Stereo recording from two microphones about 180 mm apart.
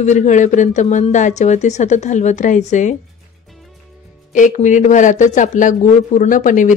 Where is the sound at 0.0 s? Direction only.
40° left (ahead or behind).